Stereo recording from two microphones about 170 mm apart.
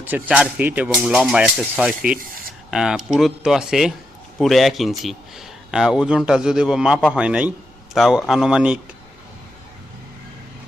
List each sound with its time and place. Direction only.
0.0 s a man's voice: 10° right (ahead or behind)